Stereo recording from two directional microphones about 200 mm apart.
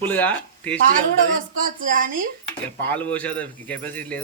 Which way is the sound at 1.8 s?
45° right (ahead or behind).